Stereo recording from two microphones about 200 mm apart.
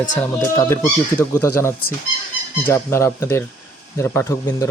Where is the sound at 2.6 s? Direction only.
10° left (ahead or behind).